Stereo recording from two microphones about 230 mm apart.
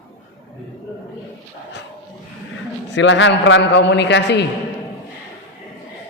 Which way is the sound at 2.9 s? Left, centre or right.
Left.